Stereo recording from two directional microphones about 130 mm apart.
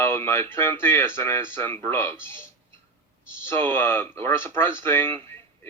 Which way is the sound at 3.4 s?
15° left (ahead or behind).